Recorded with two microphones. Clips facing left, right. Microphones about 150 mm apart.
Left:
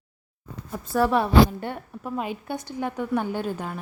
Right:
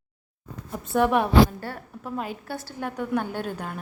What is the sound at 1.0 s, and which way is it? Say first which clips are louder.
Speech: even; 15° right (ahead or behind).